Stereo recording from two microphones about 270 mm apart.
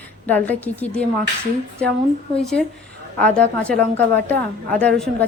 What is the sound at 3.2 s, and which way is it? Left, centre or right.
A woman's voice, centre.